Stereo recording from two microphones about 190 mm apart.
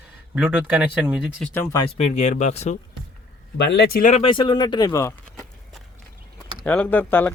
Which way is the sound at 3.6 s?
60° left (ahead or behind).